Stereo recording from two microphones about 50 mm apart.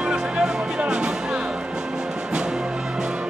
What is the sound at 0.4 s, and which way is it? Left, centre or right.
Music, centre.